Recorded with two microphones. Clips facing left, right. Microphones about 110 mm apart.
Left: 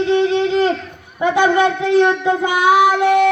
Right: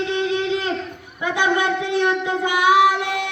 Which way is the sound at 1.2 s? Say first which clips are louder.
Left 7 dB; 30° left (ahead or behind).